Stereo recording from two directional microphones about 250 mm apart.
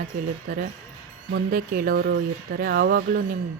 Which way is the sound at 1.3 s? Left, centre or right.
Right.